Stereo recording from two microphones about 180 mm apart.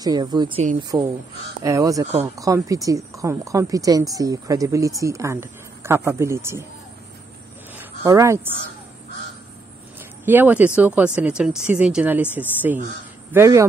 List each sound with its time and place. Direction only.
0.0 s speech: 20° right (ahead or behind)
7.7 s a sound: 15° right (ahead or behind)
10.2 s speech: 10° right (ahead or behind)